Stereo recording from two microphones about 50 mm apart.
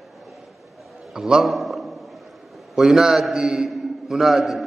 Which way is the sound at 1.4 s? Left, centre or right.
Centre.